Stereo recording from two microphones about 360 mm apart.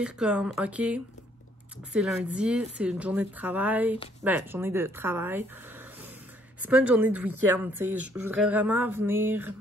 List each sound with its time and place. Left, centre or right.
0.0 s speech: centre
6.6 s speech: centre